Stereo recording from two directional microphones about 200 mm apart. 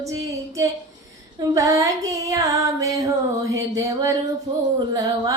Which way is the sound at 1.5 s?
15° right (ahead or behind).